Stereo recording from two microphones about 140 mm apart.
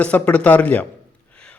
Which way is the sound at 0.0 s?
10° left (ahead or behind).